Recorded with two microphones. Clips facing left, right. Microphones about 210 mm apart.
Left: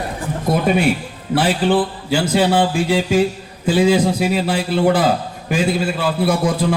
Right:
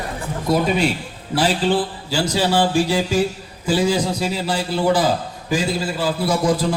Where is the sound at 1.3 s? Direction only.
55° left (ahead or behind).